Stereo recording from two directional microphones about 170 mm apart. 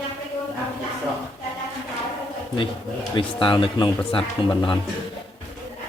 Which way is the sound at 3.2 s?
30° left (ahead or behind).